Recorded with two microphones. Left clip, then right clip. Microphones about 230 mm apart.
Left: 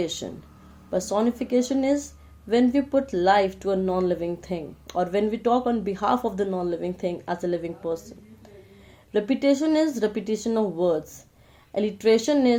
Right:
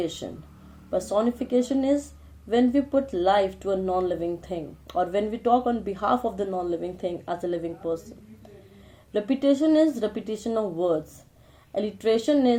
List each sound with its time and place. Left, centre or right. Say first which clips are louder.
0.0 s speech: left 1 dB; left
9.1 s speech: left 1 dB; left